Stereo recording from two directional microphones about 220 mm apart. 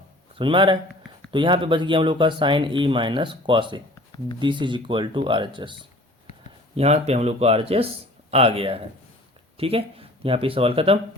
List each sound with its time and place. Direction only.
0.3 s speech: 20° right (ahead or behind)